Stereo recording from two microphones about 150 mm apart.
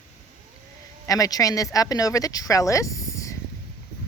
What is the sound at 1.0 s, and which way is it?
Speech, 25° left (ahead or behind).